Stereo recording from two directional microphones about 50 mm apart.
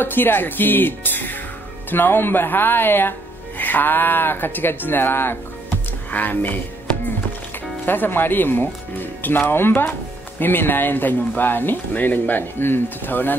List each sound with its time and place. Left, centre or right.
0.0 s speech: left
6.0 s speech: left
7.8 s speech: left